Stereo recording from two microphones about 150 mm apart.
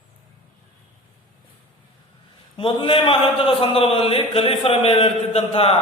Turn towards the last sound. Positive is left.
turn(degrees=40)  # may be behind; listen again after turning